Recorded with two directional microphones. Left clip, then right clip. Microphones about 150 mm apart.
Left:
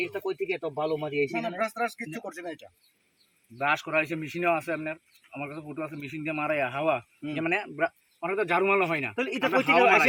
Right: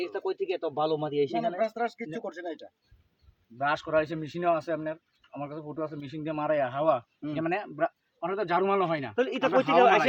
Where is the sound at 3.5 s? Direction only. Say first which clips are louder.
Left 1 dB; 30° right (ahead or behind); by 9.1 s 15° right (ahead or behind).